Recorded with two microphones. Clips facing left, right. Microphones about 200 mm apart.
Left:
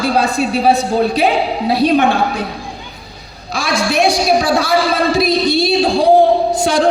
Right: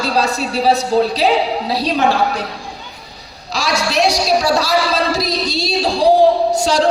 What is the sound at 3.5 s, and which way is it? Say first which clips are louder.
A woman's voice: left 2 dB; 55° left (ahead or behind).